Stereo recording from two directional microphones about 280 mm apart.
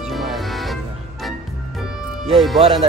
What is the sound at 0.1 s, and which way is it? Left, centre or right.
Music, centre.